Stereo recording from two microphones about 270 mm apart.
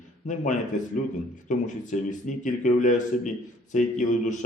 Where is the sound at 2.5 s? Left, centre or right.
Left.